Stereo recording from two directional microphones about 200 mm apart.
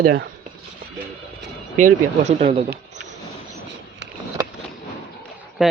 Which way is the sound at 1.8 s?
35° right (ahead or behind).